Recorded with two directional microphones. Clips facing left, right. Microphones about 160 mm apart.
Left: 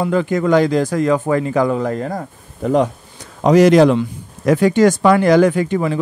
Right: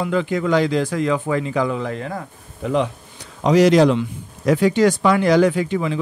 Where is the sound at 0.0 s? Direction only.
45° left (ahead or behind).